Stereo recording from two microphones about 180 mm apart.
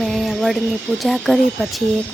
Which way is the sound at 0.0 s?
Centre (ahead or behind).